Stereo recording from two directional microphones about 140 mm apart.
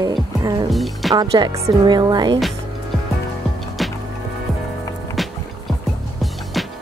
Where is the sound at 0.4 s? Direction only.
30° right (ahead or behind).